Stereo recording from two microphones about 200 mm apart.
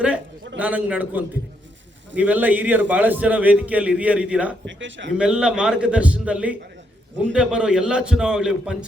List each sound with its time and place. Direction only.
0.6 s a man's voice: 5° right (ahead or behind)
4.6 s a man's voice: 65° right (ahead or behind)
5.1 s a man's voice: 5° right (ahead or behind)